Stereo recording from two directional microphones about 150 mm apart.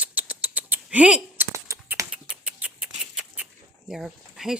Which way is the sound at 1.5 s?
20° right (ahead or behind).